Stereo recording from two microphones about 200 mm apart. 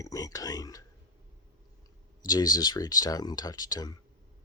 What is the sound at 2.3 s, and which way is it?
Speech, 20° left (ahead or behind).